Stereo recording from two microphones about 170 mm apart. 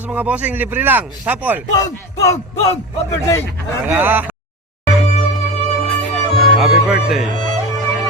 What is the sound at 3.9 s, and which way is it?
Speech, 10° right (ahead or behind).